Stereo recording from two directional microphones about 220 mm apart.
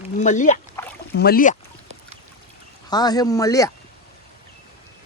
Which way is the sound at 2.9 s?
20° left (ahead or behind).